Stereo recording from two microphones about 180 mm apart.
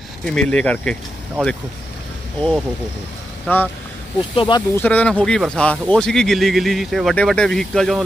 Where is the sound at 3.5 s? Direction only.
10° left (ahead or behind).